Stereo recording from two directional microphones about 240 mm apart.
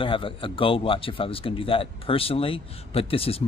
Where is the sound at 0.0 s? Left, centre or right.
Left.